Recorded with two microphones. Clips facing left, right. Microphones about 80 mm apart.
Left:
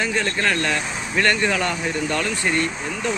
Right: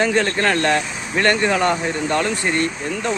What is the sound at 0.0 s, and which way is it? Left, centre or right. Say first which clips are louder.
Speech: right 4 dB; right.